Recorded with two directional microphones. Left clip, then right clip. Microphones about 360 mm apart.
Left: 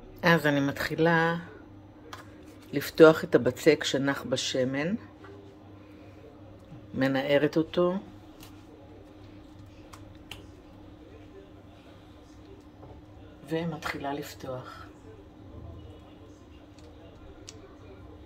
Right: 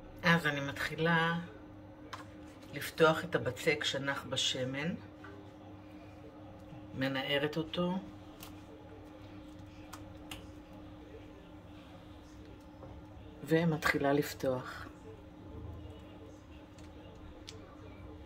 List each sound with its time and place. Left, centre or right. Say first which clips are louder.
0.2 s speech: left 7 dB; centre
2.7 s speech: left 10 dB; centre
7.0 s speech: left 9 dB; centre
13.5 s speech: right 2 dB; centre